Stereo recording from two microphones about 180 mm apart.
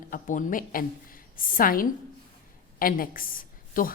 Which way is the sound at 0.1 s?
45° left (ahead or behind).